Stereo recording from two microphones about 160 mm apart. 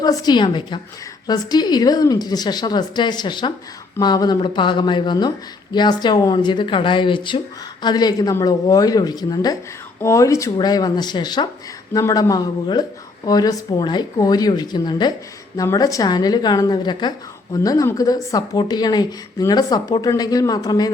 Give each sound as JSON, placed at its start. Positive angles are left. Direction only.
{"t": 0.0, "sound": "a woman's voice", "side_deg": 25}